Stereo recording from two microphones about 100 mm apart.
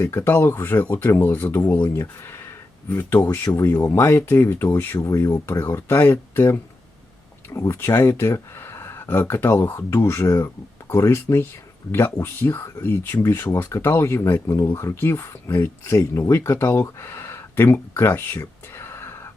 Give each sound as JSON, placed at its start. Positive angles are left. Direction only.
{"t": 0.0, "sound": "speech", "side_deg": 25}